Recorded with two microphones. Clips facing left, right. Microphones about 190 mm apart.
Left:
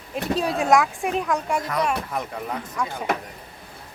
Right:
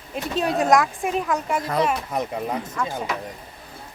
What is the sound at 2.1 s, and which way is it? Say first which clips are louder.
Speech: right 3 dB; 20° right (ahead or behind).